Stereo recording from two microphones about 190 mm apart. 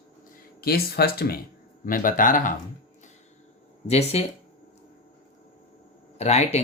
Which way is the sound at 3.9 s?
35° left (ahead or behind).